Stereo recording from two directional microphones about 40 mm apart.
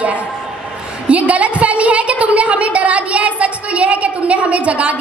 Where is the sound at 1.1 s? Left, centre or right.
Right.